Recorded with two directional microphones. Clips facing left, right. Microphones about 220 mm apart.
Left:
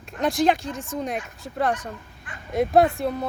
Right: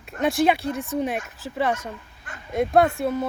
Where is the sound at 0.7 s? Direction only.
65° right (ahead or behind).